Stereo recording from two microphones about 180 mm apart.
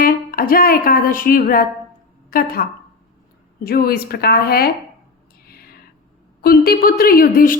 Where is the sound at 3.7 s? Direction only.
55° left (ahead or behind).